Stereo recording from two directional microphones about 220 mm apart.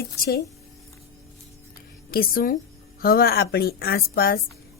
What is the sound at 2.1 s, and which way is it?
Speech, 40° left (ahead or behind).